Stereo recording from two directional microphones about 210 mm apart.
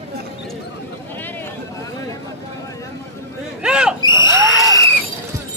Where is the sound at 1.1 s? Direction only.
10° left (ahead or behind).